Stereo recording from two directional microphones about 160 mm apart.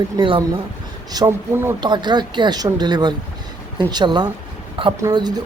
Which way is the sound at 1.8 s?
30° right (ahead or behind).